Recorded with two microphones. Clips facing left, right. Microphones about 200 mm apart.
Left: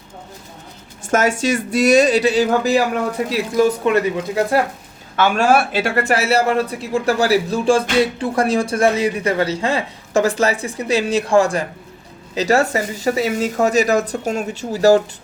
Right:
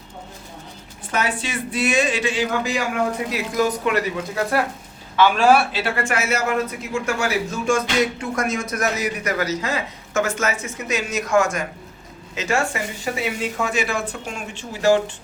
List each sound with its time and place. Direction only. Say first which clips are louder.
1.0 s a man's voice: left 8 dB; 45° left (ahead or behind); by 4.0 s 30° left (ahead or behind)
5.1 s a man's voice: even; 45° left (ahead or behind)